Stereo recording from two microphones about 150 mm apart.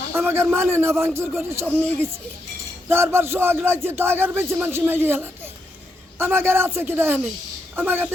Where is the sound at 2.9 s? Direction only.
15° right (ahead or behind).